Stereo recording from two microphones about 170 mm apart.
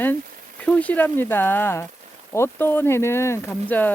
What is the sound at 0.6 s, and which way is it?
Speech, 10° left (ahead or behind).